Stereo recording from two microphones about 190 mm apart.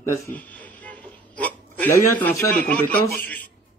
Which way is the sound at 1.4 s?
10° left (ahead or behind).